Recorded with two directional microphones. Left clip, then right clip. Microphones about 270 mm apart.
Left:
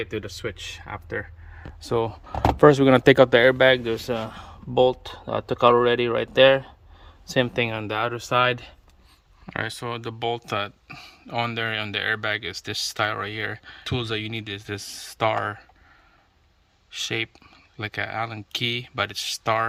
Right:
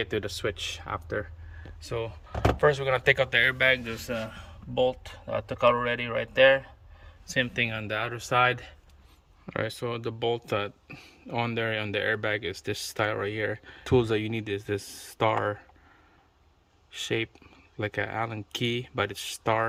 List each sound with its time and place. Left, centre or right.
0.0 s speech: centre
2.6 s speech: left
7.3 s speech: centre
9.5 s speech: centre
16.9 s speech: centre